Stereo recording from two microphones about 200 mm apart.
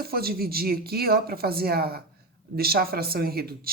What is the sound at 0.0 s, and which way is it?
Speech, 50° right (ahead or behind).